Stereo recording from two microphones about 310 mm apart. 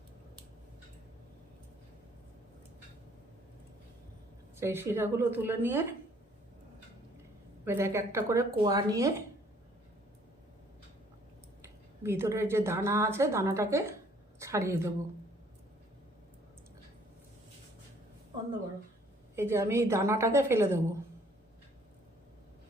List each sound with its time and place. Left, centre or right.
4.5 s speech: centre
7.6 s speech: centre
11.6 s a woman's voice: centre
19.4 s speech: centre